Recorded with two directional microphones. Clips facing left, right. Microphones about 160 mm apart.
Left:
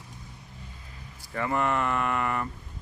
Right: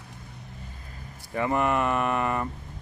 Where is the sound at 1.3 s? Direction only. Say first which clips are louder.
Right 2 dB; 20° right (ahead or behind).